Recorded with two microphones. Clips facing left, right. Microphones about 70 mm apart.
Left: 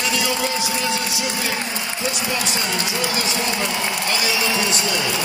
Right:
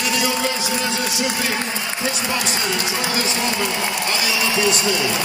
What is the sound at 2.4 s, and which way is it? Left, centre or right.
A man's voice, right.